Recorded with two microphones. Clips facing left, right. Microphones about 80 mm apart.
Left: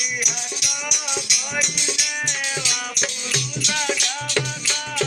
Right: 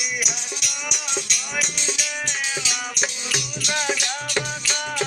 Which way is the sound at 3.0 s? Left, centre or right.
Right.